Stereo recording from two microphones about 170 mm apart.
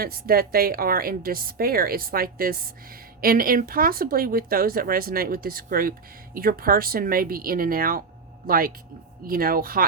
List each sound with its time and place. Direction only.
0.0 s a woman's voice: 60° right (ahead or behind)